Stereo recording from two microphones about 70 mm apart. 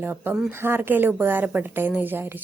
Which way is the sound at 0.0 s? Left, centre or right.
Right.